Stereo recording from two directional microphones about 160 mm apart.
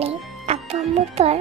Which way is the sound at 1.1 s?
40° right (ahead or behind).